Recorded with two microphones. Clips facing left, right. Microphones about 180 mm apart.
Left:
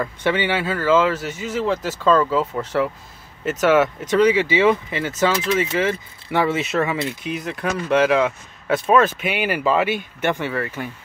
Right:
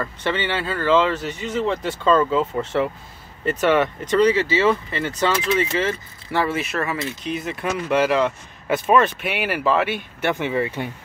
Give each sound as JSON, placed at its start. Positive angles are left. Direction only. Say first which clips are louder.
{"t": 0.0, "sound": "speech", "louder": "left 3 dB", "side_deg": 10}
{"t": 7.2, "sound": "speech", "louder": "even", "side_deg": 0}
{"t": 10.4, "sound": "speech", "louder": "right 2 dB", "side_deg": -15}